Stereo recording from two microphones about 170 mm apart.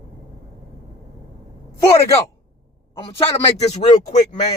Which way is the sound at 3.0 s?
35° left (ahead or behind).